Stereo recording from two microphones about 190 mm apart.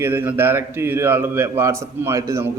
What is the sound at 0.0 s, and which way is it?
A man's voice, 10° right (ahead or behind).